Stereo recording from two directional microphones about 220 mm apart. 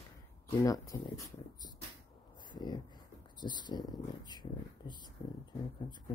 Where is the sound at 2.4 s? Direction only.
20° left (ahead or behind).